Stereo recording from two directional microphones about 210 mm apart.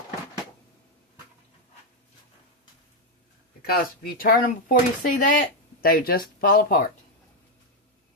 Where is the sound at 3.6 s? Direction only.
45° left (ahead or behind).